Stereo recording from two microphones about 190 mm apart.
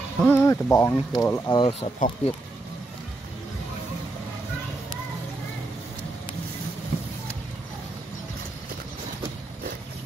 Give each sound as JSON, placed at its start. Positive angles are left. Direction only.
{"t": 0.2, "sound": "speech", "side_deg": 10}
{"t": 2.0, "sound": "speech", "side_deg": 40}